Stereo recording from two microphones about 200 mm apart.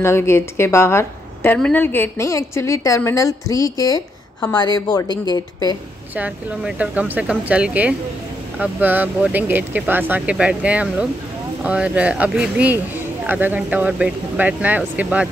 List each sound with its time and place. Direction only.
0.0 s a woman's voice: 15° left (ahead or behind)
6.1 s speech: 5° right (ahead or behind)